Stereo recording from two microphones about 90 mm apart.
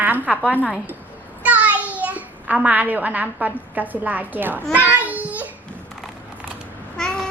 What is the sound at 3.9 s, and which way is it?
Speech, 20° right (ahead or behind).